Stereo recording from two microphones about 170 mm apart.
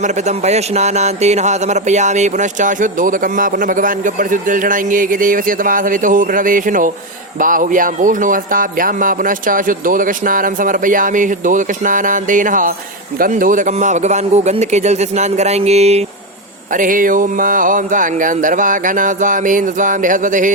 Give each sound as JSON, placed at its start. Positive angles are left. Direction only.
{"t": 0.0, "sound": "a man's voice", "side_deg": -40}
{"t": 16.7, "sound": "speech", "side_deg": -50}